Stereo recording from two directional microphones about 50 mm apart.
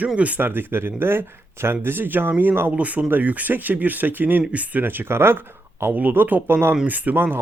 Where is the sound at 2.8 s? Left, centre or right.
Right.